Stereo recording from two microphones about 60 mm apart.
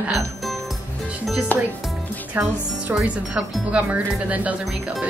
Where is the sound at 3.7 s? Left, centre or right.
Right.